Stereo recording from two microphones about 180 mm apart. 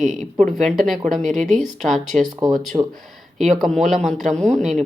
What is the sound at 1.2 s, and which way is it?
Speech, 45° right (ahead or behind).